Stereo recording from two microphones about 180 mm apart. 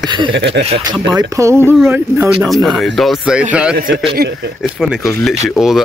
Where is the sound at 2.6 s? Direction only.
Centre (ahead or behind).